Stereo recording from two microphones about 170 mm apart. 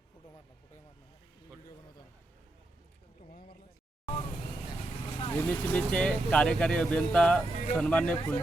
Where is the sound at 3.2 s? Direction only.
55° left (ahead or behind).